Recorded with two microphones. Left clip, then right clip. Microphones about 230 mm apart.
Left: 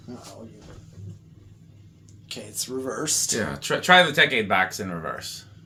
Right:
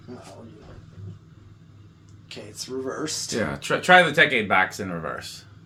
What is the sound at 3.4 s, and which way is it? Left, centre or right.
Speech, centre.